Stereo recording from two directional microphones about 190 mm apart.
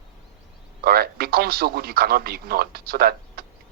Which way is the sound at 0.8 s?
55° right (ahead or behind).